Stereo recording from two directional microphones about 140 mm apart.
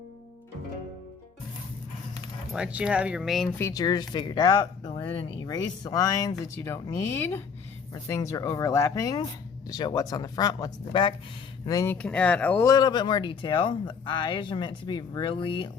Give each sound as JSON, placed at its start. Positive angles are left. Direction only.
{"t": 2.5, "sound": "speech", "side_deg": -5}
{"t": 3.6, "sound": "speech", "side_deg": 25}
{"t": 12.0, "sound": "speech", "side_deg": 10}
{"t": 12.6, "sound": "speech", "side_deg": 30}